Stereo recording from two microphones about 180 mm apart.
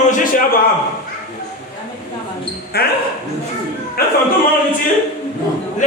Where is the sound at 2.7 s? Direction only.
60° left (ahead or behind).